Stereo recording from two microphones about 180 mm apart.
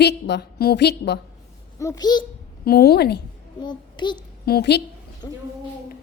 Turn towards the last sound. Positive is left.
turn(degrees=20)  # may be behind; listen again after turning